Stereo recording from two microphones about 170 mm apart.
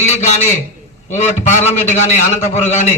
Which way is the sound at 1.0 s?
45° left (ahead or behind).